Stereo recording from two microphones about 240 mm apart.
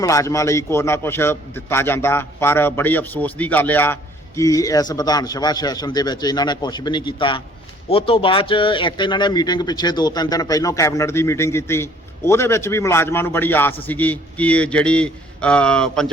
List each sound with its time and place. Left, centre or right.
0.0 s a man's voice: centre